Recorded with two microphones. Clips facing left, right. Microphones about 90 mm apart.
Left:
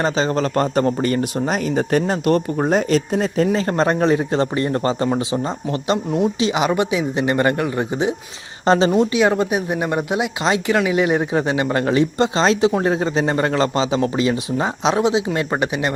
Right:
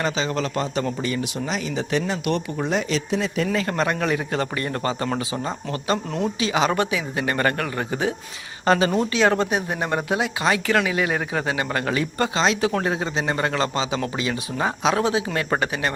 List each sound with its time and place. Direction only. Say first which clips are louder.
0.0 s a man's voice: left 5 dB; 35° left (ahead or behind)
6.1 s speech: left 6 dB; 10° left (ahead or behind)
6.4 s speech: left 3 dB; 20° left (ahead or behind)
8.9 s speech: left 4 dB; 10° left (ahead or behind)